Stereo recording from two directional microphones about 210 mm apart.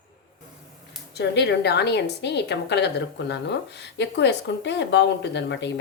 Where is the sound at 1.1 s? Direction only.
55° left (ahead or behind).